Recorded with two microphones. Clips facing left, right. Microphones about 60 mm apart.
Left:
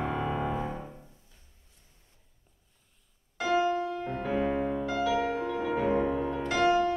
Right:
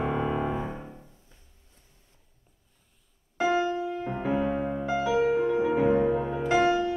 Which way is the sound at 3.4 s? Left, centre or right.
Right.